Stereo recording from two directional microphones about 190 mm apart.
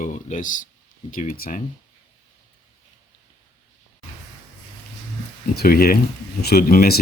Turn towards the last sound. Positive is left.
turn(degrees=50)  # may be behind; listen again after turning